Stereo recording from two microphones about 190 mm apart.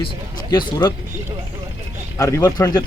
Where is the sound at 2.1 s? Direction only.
15° left (ahead or behind).